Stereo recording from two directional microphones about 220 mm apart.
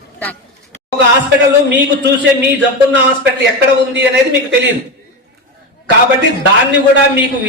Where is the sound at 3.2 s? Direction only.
50° right (ahead or behind).